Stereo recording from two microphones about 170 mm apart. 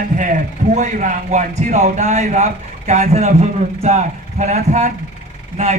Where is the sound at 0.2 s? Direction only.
45° right (ahead or behind).